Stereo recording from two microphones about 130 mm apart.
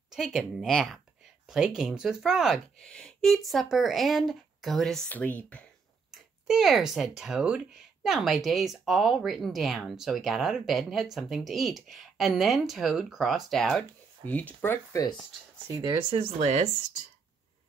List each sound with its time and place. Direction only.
0.1 s speech: 5° right (ahead or behind)
6.1 s speech: 5° right (ahead or behind)
14.6 s speech: 20° left (ahead or behind)
15.7 s speech: 30° right (ahead or behind)
16.3 s speech: 60° right (ahead or behind)